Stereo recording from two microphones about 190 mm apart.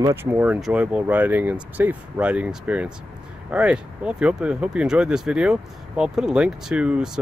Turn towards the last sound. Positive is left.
turn(degrees=-5)  # may be behind; listen again after turning